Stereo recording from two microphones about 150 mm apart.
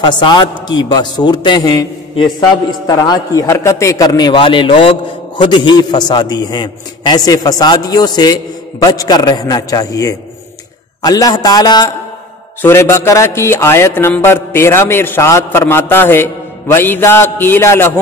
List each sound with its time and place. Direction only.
0.0 s a man's voice: 30° left (ahead or behind)
12.6 s music: 15° left (ahead or behind)